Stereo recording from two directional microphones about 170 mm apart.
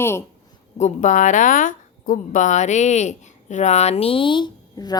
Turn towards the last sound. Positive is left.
turn(degrees=25)  # may be behind; listen again after turning